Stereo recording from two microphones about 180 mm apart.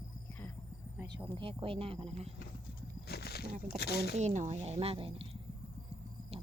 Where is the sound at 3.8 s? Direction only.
65° left (ahead or behind).